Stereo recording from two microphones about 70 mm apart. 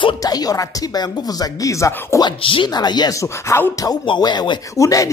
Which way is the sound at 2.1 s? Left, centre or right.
Left.